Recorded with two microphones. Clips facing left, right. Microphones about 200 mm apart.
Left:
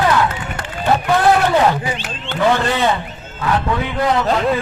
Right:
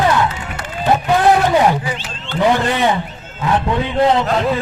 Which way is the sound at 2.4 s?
15° right (ahead or behind).